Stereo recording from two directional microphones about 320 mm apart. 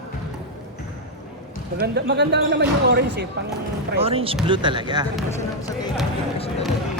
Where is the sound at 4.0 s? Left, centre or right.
Centre.